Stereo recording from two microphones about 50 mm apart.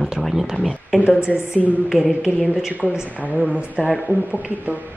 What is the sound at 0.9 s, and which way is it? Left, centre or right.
Speech, centre.